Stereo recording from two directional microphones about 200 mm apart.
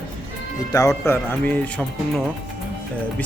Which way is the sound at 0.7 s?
15° left (ahead or behind).